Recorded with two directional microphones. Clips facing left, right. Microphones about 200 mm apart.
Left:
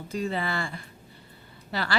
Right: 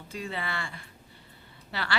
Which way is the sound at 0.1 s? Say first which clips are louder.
Left 6 dB; 40° left (ahead or behind).